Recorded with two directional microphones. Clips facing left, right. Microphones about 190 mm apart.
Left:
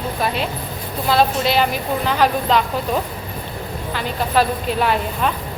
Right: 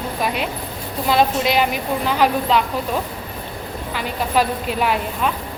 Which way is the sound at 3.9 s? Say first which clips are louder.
Left 1 dB; 10° right (ahead or behind).